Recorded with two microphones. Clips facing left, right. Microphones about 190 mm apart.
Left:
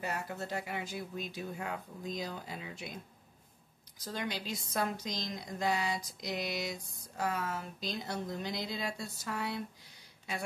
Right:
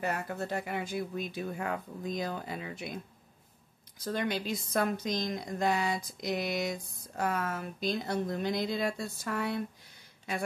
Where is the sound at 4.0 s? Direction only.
60° right (ahead or behind).